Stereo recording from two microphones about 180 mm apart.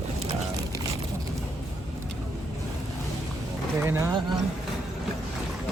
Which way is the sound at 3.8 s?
15° right (ahead or behind).